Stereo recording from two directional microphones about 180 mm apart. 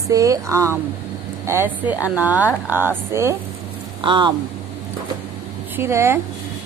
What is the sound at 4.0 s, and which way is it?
Speech, 25° right (ahead or behind).